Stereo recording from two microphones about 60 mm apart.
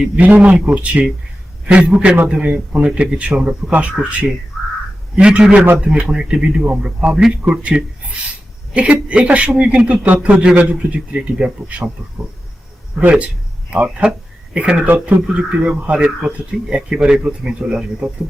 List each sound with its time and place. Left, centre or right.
0.2 s a man's voice: right
6.1 s a man's voice: centre
13.1 s a man's voice: right